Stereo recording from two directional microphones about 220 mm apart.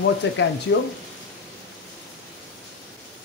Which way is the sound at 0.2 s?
55° left (ahead or behind).